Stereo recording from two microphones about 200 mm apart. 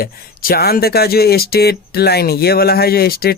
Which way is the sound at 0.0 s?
50° left (ahead or behind).